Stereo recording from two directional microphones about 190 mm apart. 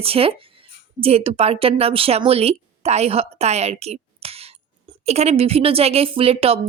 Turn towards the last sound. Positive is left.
turn(degrees=-30)  # may be behind; listen again after turning